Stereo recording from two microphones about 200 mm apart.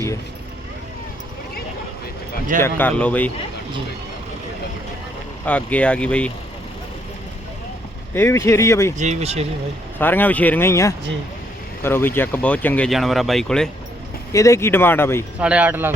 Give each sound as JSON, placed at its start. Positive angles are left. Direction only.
{"t": 2.6, "sound": "speech", "side_deg": 10}
{"t": 5.5, "sound": "speech", "side_deg": 5}
{"t": 8.1, "sound": "speech", "side_deg": 10}
{"t": 9.0, "sound": "speech", "side_deg": -35}
{"t": 10.0, "sound": "speech", "side_deg": 10}
{"t": 14.3, "sound": "speech", "side_deg": 15}
{"t": 15.4, "sound": "speech", "side_deg": -5}